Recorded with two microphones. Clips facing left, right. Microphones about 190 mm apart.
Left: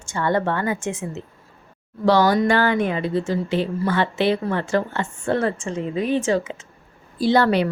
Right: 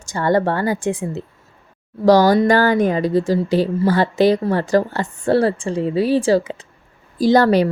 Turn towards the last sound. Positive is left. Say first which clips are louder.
# right 4 dB
turn(degrees=-40)  # may be behind; listen again after turning